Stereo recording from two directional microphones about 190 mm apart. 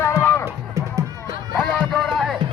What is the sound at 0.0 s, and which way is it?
Music, 15° left (ahead or behind).